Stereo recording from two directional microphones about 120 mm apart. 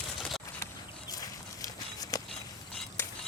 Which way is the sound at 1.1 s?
30° left (ahead or behind).